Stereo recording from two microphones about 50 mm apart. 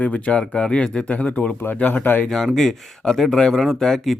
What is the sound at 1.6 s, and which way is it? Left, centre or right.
Speech, left.